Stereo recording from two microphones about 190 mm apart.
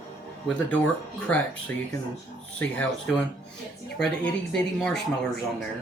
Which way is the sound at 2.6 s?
5° left (ahead or behind).